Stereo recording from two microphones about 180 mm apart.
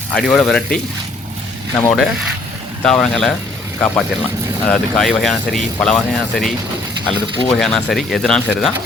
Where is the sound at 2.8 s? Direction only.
5° left (ahead or behind).